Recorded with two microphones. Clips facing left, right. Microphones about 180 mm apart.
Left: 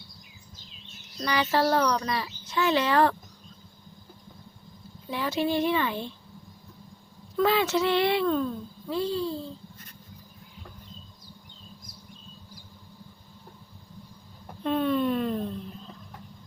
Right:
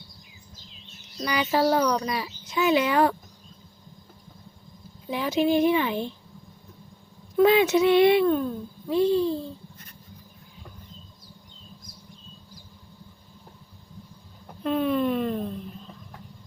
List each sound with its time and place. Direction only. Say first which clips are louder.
1.2 s speech: right 2 dB; 15° right (ahead or behind)
5.0 s speech: right 4 dB; 15° right (ahead or behind)
7.3 s speech: right 5 dB; 15° right (ahead or behind)
14.6 s a sound: right 1 dB; 5° right (ahead or behind)